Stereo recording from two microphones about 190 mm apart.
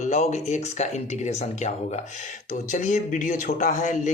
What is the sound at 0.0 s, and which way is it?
Speech, 35° left (ahead or behind).